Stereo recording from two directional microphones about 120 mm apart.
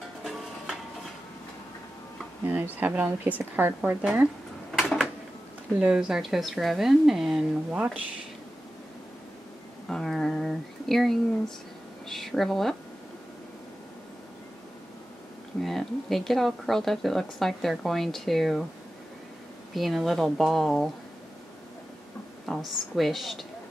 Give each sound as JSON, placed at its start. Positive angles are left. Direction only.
{"t": 2.4, "sound": "speech", "side_deg": -15}
{"t": 4.7, "sound": "a sound", "side_deg": 0}
{"t": 5.8, "sound": "speech", "side_deg": -5}
{"t": 9.8, "sound": "speech", "side_deg": 5}
{"t": 15.6, "sound": "speech", "side_deg": 0}
{"t": 19.7, "sound": "speech", "side_deg": 0}
{"t": 22.5, "sound": "speech", "side_deg": 0}